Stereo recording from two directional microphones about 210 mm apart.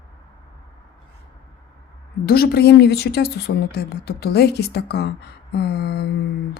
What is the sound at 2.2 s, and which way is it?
Speech, 45° left (ahead or behind).